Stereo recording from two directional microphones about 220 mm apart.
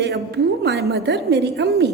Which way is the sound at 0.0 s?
50° right (ahead or behind).